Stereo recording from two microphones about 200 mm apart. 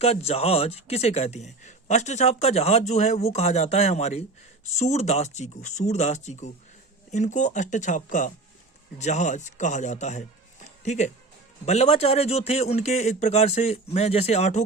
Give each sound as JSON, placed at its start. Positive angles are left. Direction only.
{"t": 0.0, "sound": "speech", "side_deg": 30}